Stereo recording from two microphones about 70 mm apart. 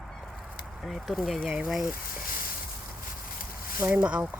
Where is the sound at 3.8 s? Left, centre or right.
Right.